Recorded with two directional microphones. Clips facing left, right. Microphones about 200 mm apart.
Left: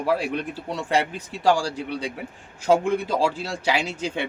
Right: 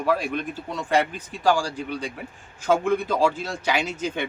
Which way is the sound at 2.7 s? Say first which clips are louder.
Left 1 dB; 30° left (ahead or behind).